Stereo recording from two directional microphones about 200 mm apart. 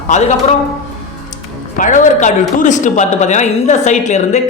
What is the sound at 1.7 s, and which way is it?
A woman's voice, 40° left (ahead or behind).